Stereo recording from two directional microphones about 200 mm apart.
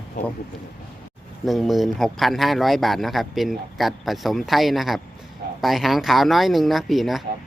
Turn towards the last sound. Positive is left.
turn(degrees=0)  # may be behind; listen again after turning